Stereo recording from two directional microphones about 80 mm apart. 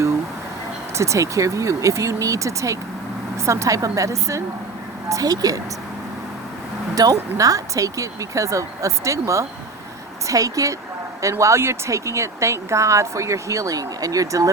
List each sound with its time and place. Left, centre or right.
0.9 s a woman's voice: right
6.9 s a woman's voice: right